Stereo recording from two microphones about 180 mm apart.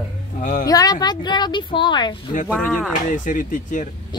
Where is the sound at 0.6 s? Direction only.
20° left (ahead or behind).